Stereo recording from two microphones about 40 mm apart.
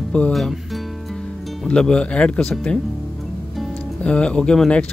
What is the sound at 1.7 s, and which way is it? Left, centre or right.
Speech, left.